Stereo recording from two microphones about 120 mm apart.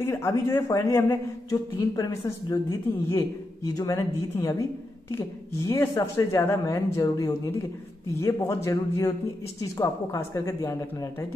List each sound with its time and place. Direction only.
0.0 s a man's voice: 25° left (ahead or behind)